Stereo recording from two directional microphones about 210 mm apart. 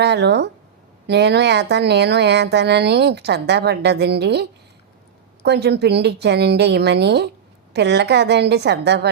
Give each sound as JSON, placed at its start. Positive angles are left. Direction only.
{"t": 0.0, "sound": "speech", "side_deg": -55}